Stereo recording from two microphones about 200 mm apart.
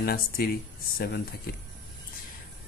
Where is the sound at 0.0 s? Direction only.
50° left (ahead or behind).